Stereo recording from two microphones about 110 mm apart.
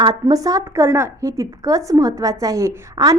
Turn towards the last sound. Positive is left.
turn(degrees=-30)  # may be behind; listen again after turning